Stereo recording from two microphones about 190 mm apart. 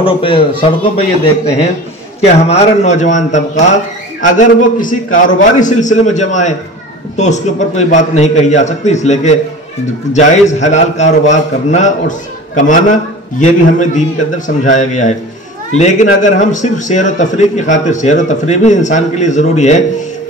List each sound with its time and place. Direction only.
0.0 s a man's voice: 30° left (ahead or behind)